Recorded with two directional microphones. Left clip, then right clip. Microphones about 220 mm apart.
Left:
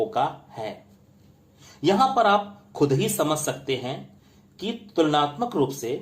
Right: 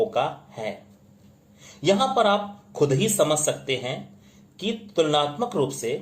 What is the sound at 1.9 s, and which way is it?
Speech, 30° left (ahead or behind).